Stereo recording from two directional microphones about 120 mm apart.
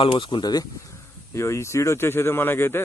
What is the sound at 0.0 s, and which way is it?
Speech, 45° left (ahead or behind).